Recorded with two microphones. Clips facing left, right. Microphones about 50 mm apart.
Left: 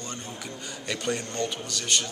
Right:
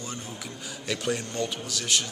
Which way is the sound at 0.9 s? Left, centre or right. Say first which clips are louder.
Right 1 dB; centre.